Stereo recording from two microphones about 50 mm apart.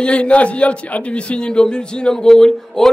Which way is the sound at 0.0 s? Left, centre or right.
Left.